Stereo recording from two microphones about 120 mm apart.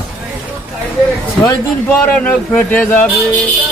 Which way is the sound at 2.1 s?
10° left (ahead or behind).